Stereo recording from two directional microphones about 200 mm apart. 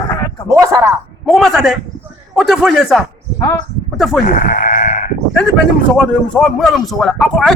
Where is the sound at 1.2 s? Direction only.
Centre (ahead or behind).